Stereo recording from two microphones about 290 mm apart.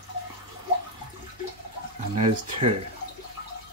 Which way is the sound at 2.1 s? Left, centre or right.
Right.